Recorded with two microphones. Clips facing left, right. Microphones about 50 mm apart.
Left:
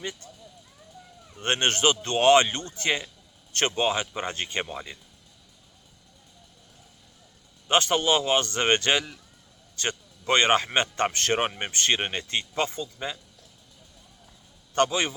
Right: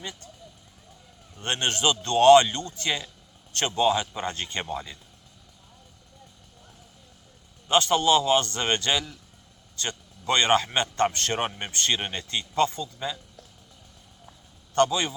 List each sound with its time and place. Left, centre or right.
1.4 s speech: left
7.7 s speech: left
10.2 s speech: left
14.8 s speech: left